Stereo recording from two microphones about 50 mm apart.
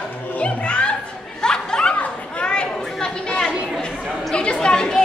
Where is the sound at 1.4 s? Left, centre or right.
Centre.